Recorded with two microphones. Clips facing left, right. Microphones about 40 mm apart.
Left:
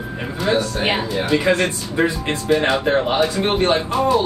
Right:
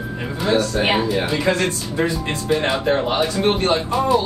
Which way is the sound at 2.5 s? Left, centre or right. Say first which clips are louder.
Left 2 dB; centre.